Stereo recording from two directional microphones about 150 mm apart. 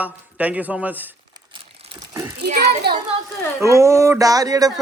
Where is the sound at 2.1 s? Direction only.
20° right (ahead or behind).